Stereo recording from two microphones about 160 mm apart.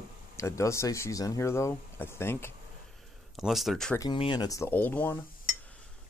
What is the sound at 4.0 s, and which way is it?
Speech, 30° left (ahead or behind).